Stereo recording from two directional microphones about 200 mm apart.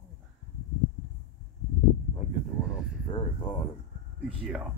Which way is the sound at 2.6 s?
25° left (ahead or behind).